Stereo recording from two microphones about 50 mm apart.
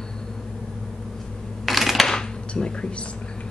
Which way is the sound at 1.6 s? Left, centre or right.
Centre.